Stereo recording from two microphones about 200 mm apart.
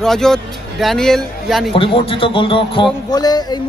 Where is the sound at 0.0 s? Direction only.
Centre (ahead or behind).